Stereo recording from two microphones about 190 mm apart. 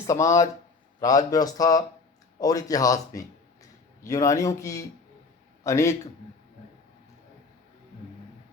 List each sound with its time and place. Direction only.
0.1 s a man's voice: 15° left (ahead or behind)